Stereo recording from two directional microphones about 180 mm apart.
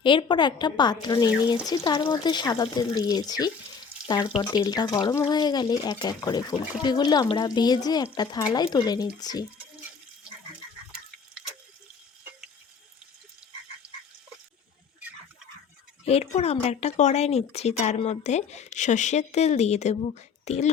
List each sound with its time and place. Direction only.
0.0 s speech: 25° left (ahead or behind)
13.4 s frog: 5° right (ahead or behind)
16.0 s speech: 35° left (ahead or behind)